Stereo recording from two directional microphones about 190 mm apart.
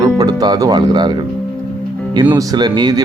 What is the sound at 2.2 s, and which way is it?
Speech, 15° right (ahead or behind).